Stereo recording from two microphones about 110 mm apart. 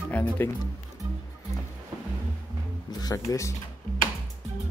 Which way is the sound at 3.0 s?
30° left (ahead or behind).